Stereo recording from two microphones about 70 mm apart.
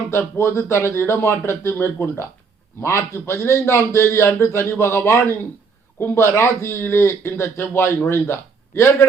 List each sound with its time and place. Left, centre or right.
0.1 s speech: left